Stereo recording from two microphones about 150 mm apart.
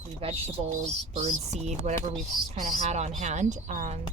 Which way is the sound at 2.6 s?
60° right (ahead or behind).